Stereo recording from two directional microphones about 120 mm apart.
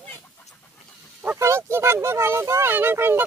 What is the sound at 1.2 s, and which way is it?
Speech, 20° right (ahead or behind).